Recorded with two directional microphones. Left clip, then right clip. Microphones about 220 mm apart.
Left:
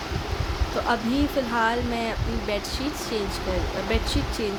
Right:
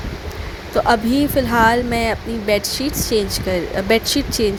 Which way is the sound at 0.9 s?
30° right (ahead or behind).